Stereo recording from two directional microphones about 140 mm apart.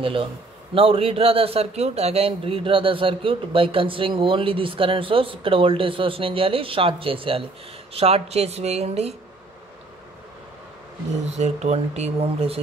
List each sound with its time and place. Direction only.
0.0 s a man's voice: 40° right (ahead or behind)
11.2 s speech: 55° right (ahead or behind)